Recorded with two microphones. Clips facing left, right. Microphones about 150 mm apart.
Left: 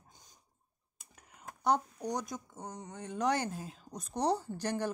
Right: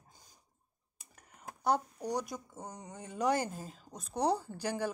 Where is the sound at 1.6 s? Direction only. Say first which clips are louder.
Left 1 dB; 5° right (ahead or behind).